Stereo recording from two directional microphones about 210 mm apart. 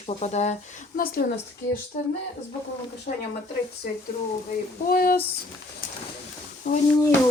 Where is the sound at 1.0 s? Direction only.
45° left (ahead or behind).